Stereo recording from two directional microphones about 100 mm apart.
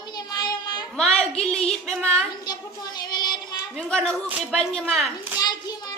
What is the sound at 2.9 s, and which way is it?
Child singing, 45° left (ahead or behind).